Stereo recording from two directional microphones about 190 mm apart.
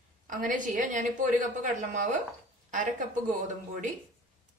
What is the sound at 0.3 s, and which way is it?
A woman's voice, 45° right (ahead or behind).